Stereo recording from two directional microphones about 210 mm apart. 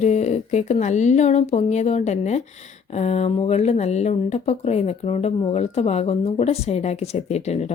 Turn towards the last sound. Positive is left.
turn(degrees=30)  # may be behind; listen again after turning